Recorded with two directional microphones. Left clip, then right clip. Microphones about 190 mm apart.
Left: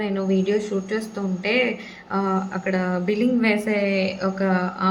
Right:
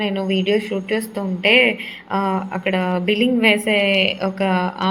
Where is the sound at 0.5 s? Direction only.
15° right (ahead or behind).